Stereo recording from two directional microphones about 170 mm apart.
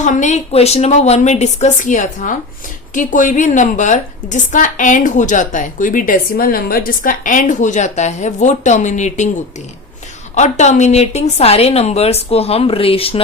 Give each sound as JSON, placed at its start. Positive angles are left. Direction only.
{"t": 0.0, "sound": "a woman's voice", "side_deg": 45}
{"t": 10.3, "sound": "a woman's voice", "side_deg": 45}